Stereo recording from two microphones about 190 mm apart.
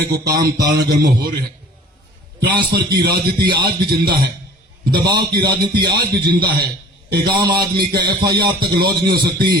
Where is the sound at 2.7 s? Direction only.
55° right (ahead or behind).